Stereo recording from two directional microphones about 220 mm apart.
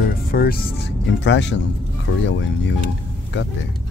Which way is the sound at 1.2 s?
55° left (ahead or behind).